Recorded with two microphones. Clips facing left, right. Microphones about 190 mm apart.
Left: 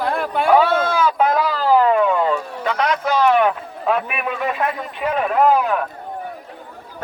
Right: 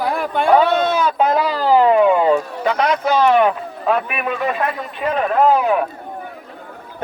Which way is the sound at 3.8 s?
10° left (ahead or behind).